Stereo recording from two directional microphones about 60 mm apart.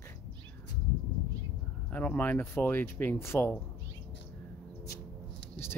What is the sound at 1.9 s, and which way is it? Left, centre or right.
Speech, left.